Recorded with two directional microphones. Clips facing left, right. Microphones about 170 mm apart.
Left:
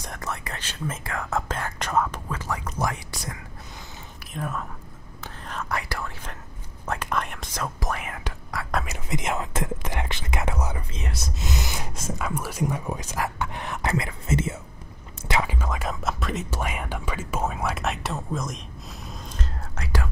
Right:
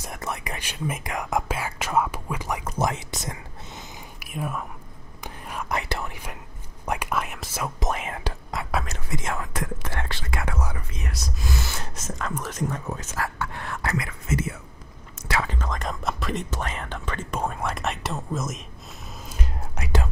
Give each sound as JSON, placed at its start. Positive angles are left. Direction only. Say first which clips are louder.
{"t": 0.2, "sound": "speech", "louder": "right 2 dB", "side_deg": -15}
{"t": 4.2, "sound": "speech", "louder": "right 1 dB", "side_deg": -10}
{"t": 5.2, "sound": "whispering", "louder": "right 1 dB", "side_deg": -10}
{"t": 6.9, "sound": "speech", "louder": "right 1 dB", "side_deg": -10}
{"t": 7.8, "sound": "speech", "louder": "right 3 dB", "side_deg": -25}
{"t": 8.9, "sound": "speech", "louder": "left 2 dB", "side_deg": 20}
{"t": 15.2, "sound": "whispering", "louder": "left 1 dB", "side_deg": 20}
{"t": 15.5, "sound": "speech", "louder": "left 1 dB", "side_deg": 10}
{"t": 19.0, "sound": "whispering", "louder": "right 1 dB", "side_deg": -10}